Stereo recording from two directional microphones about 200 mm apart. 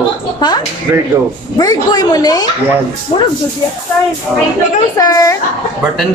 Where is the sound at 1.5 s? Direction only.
20° left (ahead or behind).